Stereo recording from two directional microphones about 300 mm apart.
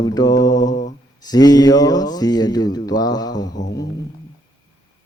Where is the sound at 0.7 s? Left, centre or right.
Left.